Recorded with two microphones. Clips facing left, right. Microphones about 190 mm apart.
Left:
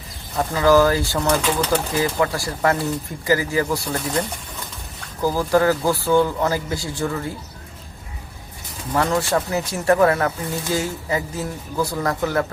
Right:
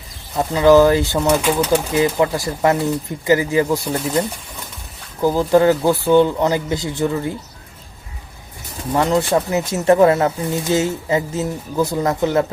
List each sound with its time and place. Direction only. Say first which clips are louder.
0.3 s speech: right 4 dB; 20° right (ahead or behind)
5.2 s speech: right 4 dB; 20° right (ahead or behind)
9.0 s speech: right 3 dB; 20° right (ahead or behind)